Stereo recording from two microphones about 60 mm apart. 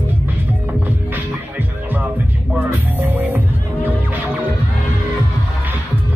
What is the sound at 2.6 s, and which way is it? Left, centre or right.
Music, right.